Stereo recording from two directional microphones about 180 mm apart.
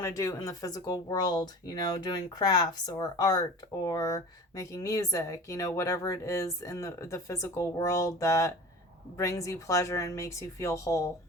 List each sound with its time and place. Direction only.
0.0 s speech: 20° left (ahead or behind)